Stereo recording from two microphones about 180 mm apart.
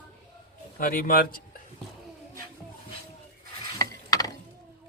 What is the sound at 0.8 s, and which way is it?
Speech, 50° left (ahead or behind).